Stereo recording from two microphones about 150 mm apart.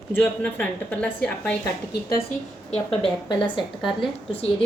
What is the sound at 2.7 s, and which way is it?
Speech, 35° left (ahead or behind).